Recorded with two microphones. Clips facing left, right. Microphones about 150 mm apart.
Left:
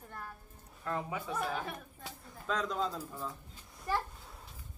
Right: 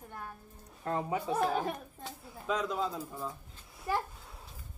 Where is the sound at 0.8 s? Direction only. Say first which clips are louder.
Right 4 dB; 35° right (ahead or behind).